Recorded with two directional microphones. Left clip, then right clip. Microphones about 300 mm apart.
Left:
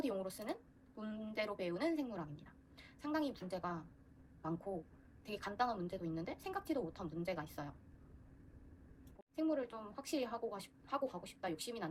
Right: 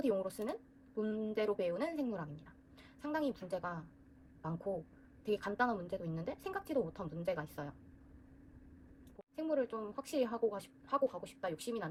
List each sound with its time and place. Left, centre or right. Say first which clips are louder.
0.0 s speech: right 6 dB; centre
5.2 s speech: right 4 dB; centre
9.3 s speech: right 3 dB; right